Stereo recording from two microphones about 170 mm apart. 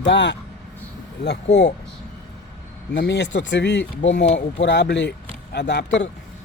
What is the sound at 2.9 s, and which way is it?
Speech, 90° left.